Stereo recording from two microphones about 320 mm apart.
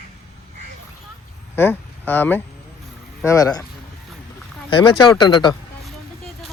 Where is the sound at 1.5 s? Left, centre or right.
Centre.